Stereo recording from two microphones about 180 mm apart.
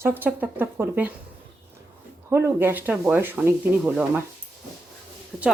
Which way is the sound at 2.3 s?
15° right (ahead or behind).